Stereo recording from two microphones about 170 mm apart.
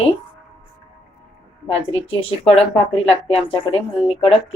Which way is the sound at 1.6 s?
30° left (ahead or behind).